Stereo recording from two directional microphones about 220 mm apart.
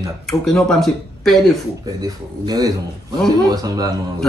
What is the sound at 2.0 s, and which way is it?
A man's voice, 20° right (ahead or behind).